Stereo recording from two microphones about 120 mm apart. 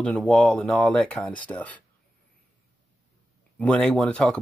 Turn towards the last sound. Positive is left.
turn(degrees=10)  # may be behind; listen again after turning